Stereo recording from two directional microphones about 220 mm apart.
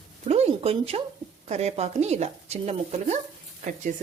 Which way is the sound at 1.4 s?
30° right (ahead or behind).